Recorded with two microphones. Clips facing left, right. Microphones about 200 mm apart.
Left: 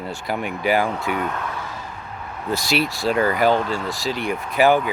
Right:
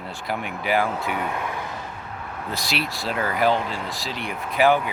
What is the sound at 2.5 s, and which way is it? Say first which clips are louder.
Speech: left 7 dB; centre (ahead or behind).